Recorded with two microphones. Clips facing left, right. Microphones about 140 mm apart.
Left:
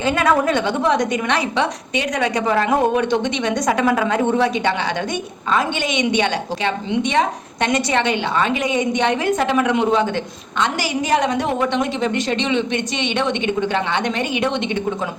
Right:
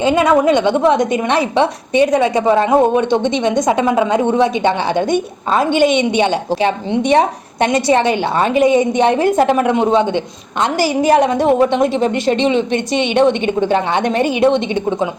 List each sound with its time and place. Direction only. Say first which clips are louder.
0.0 s a woman's voice: right 5 dB; 20° right (ahead or behind)
5.5 s a woman's voice: right 7 dB; 35° right (ahead or behind)